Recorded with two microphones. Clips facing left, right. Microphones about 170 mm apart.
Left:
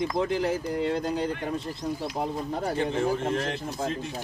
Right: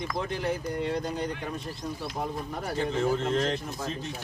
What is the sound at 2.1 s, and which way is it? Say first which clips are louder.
Speech: left 3 dB; 25° left (ahead or behind).